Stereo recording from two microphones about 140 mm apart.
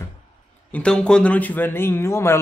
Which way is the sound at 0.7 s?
5° left (ahead or behind).